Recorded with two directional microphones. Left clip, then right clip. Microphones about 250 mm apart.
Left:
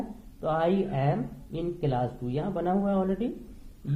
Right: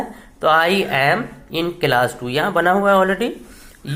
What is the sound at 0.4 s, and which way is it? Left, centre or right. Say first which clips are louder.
A woman's voice: right 12 dB; right.